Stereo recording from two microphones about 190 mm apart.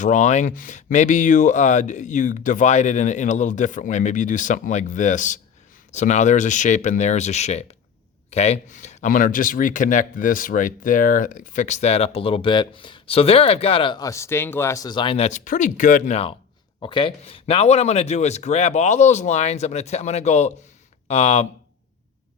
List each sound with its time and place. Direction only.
0.0 s speech: 40° left (ahead or behind)
16.8 s speech: 25° left (ahead or behind)